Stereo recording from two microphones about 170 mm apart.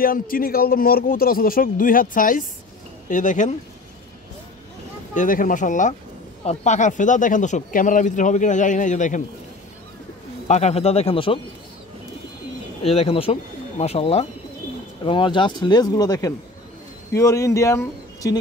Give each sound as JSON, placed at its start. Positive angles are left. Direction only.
{"t": 0.0, "sound": "a man's voice", "side_deg": 60}
{"t": 5.1, "sound": "speech", "side_deg": 50}
{"t": 10.5, "sound": "speech", "side_deg": 40}
{"t": 12.8, "sound": "speech", "side_deg": 35}